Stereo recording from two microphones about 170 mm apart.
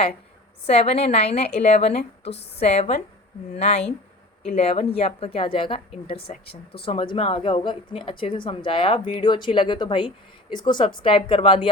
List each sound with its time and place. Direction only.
0.7 s speech: 35° left (ahead or behind)
6.1 s speech: 65° left (ahead or behind)
6.8 s speech: 30° left (ahead or behind)